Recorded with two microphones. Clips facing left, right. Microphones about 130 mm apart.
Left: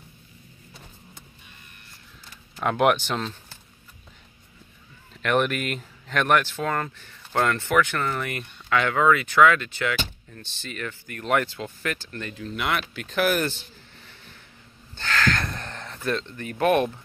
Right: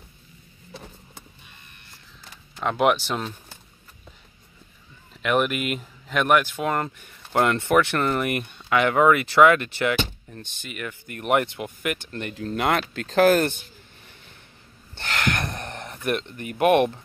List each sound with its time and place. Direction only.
2.6 s speech: centre (ahead or behind)
5.2 s speech: 5° right (ahead or behind); by 10.4 s 25° right (ahead or behind)
10.6 s speech: 15° right (ahead or behind)
12.4 s speech: 35° right (ahead or behind)
15.0 s gasp: 25° right (ahead or behind)